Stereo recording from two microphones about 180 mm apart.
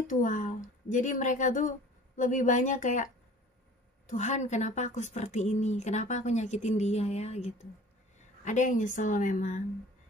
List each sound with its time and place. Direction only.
0.0 s speech: 45° left (ahead or behind)
4.1 s a woman's voice: 40° left (ahead or behind)